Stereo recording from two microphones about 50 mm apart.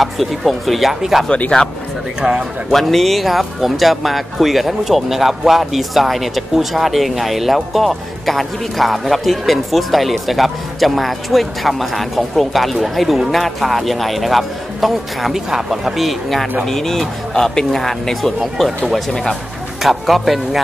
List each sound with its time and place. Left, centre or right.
0.0 s speech: centre
2.2 s speech: right
2.7 s speech: centre